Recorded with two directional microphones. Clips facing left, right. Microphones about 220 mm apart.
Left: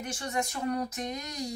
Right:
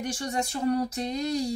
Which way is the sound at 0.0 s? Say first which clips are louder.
Right 3 dB; 30° right (ahead or behind).